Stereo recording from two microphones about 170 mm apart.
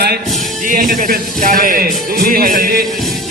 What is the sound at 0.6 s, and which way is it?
Speech, 55° right (ahead or behind).